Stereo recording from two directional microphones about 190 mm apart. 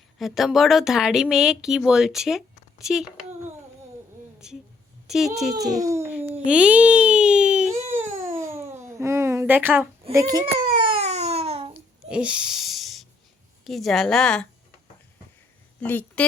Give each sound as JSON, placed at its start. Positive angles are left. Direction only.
{"t": 0.2, "sound": "speech", "side_deg": 0}
{"t": 4.4, "sound": "speech", "side_deg": -5}
{"t": 5.8, "sound": "babbling", "side_deg": -15}
{"t": 6.5, "sound": "speech", "side_deg": -5}
{"t": 7.9, "sound": "baby cry", "side_deg": -10}
{"t": 10.1, "sound": "speech", "side_deg": -15}
{"t": 10.4, "sound": "baby cry", "side_deg": -25}
{"t": 11.7, "sound": "a sound", "side_deg": -5}
{"t": 13.7, "sound": "speech", "side_deg": 0}
{"t": 15.8, "sound": "a woman's voice", "side_deg": 10}